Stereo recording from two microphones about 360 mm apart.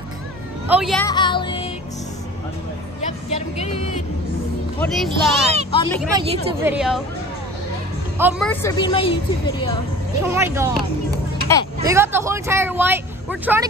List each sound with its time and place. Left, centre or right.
0.7 s music: centre
3.3 s a woman's voice: centre
4.7 s a woman's voice: centre
5.7 s speech: centre
6.1 s a woman's voice: centre
8.2 s a woman's voice: centre
10.2 s speech: centre